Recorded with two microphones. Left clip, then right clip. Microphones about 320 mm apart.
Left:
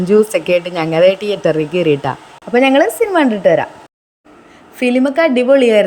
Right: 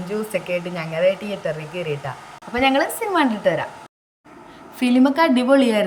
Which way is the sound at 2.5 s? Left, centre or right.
Centre.